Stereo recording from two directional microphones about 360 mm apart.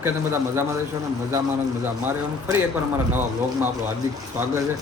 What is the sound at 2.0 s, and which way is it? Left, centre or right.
Speech, centre.